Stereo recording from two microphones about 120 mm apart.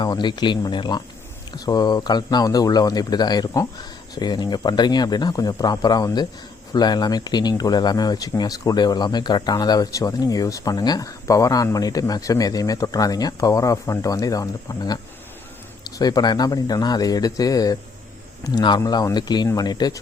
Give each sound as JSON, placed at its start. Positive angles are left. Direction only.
{"t": 0.0, "sound": "speech", "side_deg": 40}
{"t": 16.0, "sound": "speech", "side_deg": 30}